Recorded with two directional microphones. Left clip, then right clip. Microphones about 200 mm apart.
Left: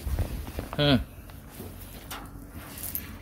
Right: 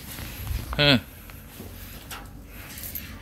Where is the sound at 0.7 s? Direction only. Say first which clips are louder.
Right 5 dB; 10° left (ahead or behind).